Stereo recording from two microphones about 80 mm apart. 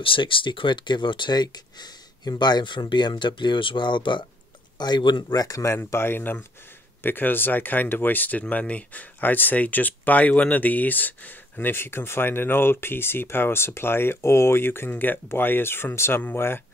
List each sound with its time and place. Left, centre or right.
0.0 s speech: left
4.7 s speech: left
5.4 s speech: left
5.9 s speech: left